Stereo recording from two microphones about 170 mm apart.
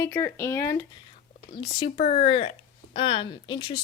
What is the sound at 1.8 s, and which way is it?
A woman's voice, 30° left (ahead or behind).